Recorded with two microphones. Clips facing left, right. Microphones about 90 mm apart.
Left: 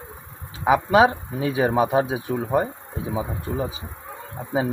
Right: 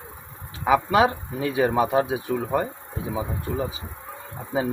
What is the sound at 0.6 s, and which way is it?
Speech, 20° left (ahead or behind).